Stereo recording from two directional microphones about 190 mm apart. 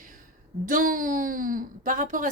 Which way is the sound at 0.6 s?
45° right (ahead or behind).